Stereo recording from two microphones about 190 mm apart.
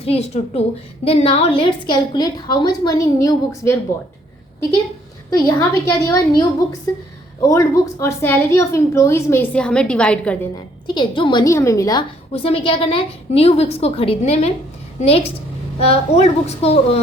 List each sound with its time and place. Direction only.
0.0 s a woman's voice: 30° left (ahead or behind); by 3.8 s 15° left (ahead or behind)
5.5 s a woman's voice: 15° left (ahead or behind)
7.4 s a woman's voice: 15° left (ahead or behind)
10.8 s a woman's voice: 25° left (ahead or behind)
12.3 s a woman's voice: 30° left (ahead or behind)